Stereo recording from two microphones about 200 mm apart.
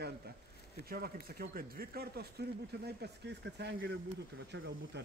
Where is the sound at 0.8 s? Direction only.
50° right (ahead or behind).